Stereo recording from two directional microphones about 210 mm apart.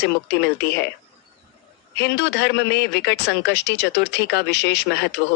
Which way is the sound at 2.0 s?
55° left (ahead or behind).